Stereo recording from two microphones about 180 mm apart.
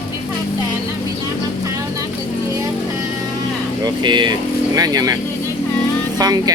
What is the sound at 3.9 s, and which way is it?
Speech, 25° right (ahead or behind).